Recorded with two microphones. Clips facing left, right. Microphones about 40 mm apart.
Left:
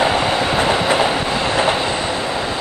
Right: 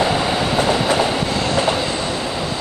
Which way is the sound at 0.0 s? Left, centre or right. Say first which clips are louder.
Left 2 dB; left.